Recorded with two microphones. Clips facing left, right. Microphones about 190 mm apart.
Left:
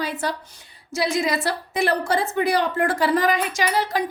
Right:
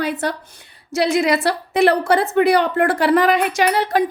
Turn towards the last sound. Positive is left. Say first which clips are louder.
# right 5 dB
turn(degrees=-60)  # may be behind; listen again after turning